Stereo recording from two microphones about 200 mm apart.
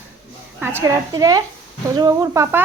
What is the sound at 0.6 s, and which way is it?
Speech, 10° right (ahead or behind).